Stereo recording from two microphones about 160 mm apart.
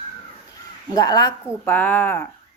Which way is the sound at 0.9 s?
20° left (ahead or behind).